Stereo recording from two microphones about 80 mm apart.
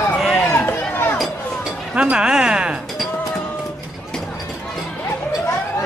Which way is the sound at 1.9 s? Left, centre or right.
Centre.